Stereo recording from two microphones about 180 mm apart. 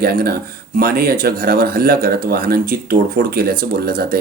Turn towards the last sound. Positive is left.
turn(degrees=-55)  # may be behind; listen again after turning